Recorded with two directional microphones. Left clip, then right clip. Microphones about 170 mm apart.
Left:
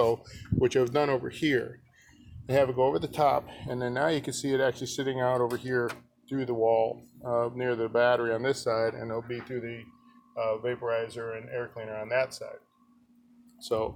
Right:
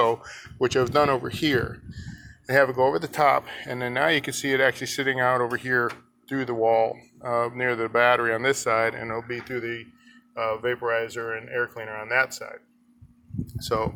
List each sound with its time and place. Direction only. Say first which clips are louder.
0.6 s speech: right 4 dB; 5° left (ahead or behind)
5.4 s speech: right 3 dB; 25° right (ahead or behind)
6.2 s speech: right 3 dB; 5° right (ahead or behind)